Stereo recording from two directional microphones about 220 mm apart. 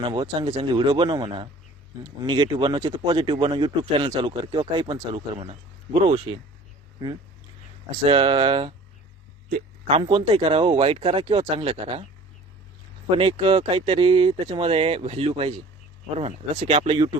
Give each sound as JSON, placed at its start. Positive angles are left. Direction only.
{"t": 0.0, "sound": "speech", "side_deg": -20}
{"t": 9.5, "sound": "speech", "side_deg": -35}
{"t": 13.1, "sound": "speech", "side_deg": -25}